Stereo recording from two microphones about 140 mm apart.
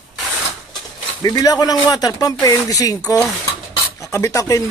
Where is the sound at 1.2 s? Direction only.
25° left (ahead or behind).